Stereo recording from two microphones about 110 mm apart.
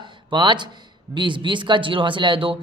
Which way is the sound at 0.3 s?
45° right (ahead or behind).